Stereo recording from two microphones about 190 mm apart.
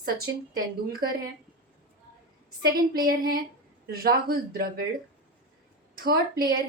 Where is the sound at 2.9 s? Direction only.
50° right (ahead or behind).